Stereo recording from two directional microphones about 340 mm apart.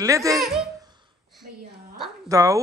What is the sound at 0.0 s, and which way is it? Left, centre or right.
Speech, centre.